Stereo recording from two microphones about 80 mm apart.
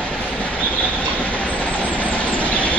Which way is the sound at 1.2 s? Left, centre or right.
Centre.